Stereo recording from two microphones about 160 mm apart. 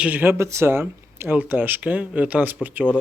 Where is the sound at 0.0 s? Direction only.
10° right (ahead or behind).